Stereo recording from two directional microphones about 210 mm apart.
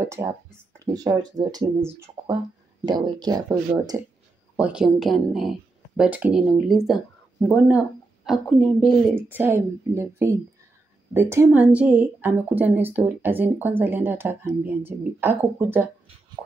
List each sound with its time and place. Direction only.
0.0 s a woman's voice: 10° right (ahead or behind)
9.1 s a woman's voice: 10° right (ahead or behind)